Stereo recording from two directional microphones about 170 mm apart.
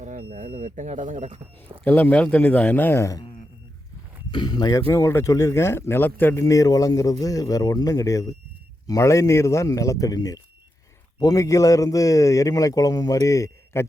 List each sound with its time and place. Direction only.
0.0 s speech: 50° right (ahead or behind)
1.8 s speech: 10° left (ahead or behind)
4.3 s speech: 25° left (ahead or behind)